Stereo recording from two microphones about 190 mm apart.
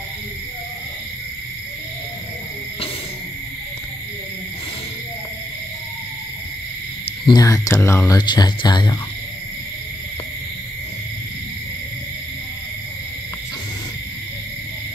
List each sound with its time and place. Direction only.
7.2 s speech: 20° left (ahead or behind)